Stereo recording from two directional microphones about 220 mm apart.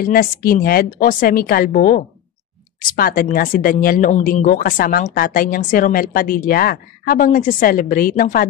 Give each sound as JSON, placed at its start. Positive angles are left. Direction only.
{"t": 0.0, "sound": "speech", "side_deg": 40}